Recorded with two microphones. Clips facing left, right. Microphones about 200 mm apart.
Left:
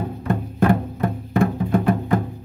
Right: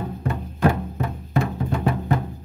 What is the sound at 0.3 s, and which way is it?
Music, 55° left (ahead or behind).